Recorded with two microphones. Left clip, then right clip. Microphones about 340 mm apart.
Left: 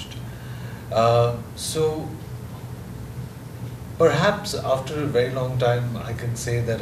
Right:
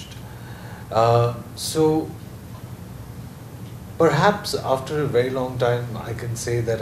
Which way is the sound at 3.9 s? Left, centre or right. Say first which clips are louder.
Right 1 dB; right.